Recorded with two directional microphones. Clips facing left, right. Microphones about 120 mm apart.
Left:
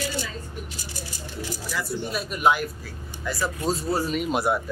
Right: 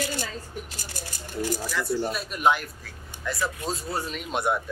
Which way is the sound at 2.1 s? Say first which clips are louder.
Left 4 dB; centre (ahead or behind).